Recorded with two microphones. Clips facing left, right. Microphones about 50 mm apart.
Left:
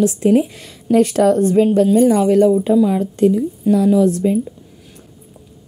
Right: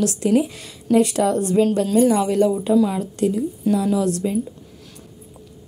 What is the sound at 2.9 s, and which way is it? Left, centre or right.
Speech, left.